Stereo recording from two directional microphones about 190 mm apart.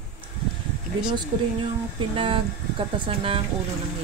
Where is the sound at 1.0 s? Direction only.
25° right (ahead or behind).